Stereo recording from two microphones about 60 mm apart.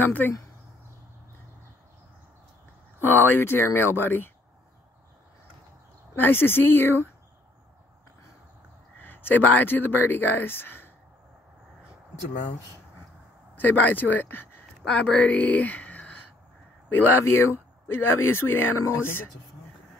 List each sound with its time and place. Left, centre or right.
0.0 s speech: left
3.0 s speech: left
6.1 s speech: left
9.0 s speech: left
13.6 s speech: left
14.9 s speech: centre
16.9 s speech: left